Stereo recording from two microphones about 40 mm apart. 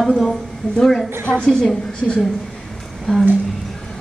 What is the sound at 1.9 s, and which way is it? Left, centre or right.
Speech, left.